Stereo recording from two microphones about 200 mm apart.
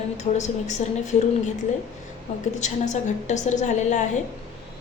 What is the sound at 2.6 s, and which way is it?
A woman's voice, 35° left (ahead or behind).